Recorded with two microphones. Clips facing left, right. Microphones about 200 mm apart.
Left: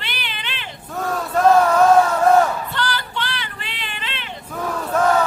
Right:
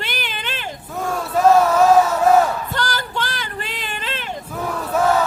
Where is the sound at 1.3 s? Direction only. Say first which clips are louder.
Even; 5° right (ahead or behind).